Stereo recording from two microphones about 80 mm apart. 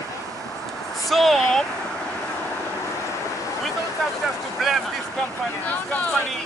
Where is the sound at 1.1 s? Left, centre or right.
Centre.